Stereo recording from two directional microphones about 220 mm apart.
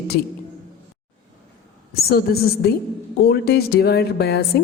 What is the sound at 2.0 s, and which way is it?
A woman's voice, 45° left (ahead or behind).